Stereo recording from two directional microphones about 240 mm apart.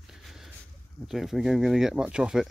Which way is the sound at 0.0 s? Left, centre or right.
Centre.